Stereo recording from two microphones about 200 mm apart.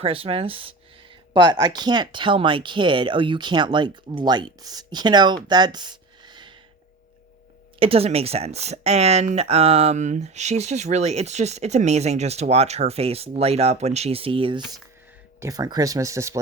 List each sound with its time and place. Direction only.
0.0 s speech: 30° right (ahead or behind)
7.8 s speech: 30° right (ahead or behind)